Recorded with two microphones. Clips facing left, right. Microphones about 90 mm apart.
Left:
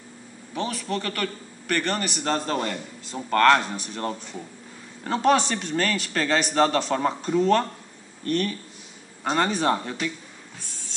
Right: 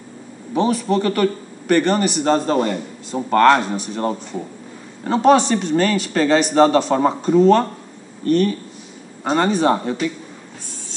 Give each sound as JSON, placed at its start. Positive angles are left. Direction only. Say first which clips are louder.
{"t": 0.6, "sound": "a man's voice", "louder": "right 10 dB", "side_deg": -15}
{"t": 8.3, "sound": "a man's voice", "louder": "right 9 dB", "side_deg": -5}